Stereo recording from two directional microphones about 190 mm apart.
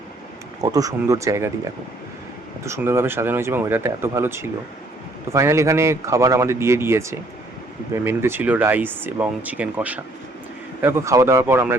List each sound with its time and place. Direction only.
0.6 s speech: 20° right (ahead or behind)
2.6 s speech: 15° right (ahead or behind)